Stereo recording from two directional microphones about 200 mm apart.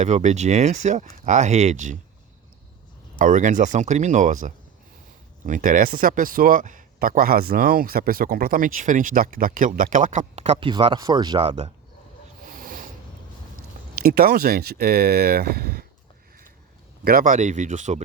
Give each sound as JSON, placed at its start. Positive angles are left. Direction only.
{"t": 0.0, "sound": "speech", "side_deg": -35}
{"t": 3.2, "sound": "speech", "side_deg": -40}
{"t": 12.5, "sound": "a sound", "side_deg": -45}
{"t": 13.9, "sound": "speech", "side_deg": -50}
{"t": 17.0, "sound": "speech", "side_deg": -45}